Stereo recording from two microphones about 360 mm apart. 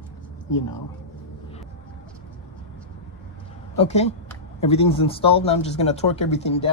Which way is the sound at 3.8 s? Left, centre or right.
Centre.